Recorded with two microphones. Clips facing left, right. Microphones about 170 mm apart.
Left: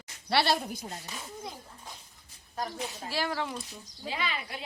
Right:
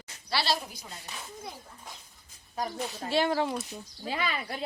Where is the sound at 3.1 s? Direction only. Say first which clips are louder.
Right 7 dB; 25° right (ahead or behind).